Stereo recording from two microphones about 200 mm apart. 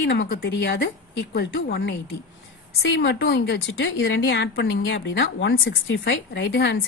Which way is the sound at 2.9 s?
55° left (ahead or behind).